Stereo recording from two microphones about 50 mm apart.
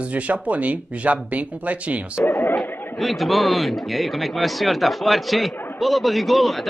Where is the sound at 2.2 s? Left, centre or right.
Left.